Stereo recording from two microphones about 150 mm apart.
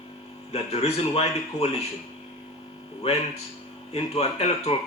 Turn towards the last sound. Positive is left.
turn(degrees=45)  # may be behind; listen again after turning